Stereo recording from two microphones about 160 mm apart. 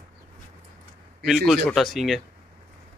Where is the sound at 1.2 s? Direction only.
Centre (ahead or behind).